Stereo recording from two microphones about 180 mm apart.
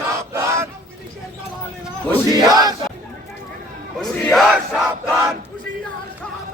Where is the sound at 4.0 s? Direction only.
Centre (ahead or behind).